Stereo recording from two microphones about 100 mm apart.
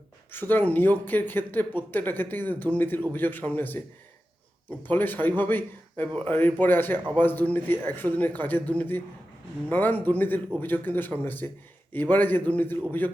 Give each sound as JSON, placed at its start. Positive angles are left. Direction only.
{"t": 0.3, "sound": "a man's voice", "side_deg": 20}